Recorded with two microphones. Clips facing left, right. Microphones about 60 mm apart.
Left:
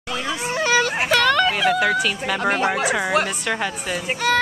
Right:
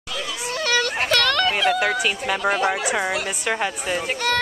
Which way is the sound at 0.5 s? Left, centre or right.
Centre.